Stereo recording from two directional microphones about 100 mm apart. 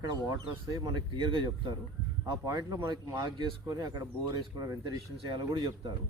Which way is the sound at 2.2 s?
40° right (ahead or behind).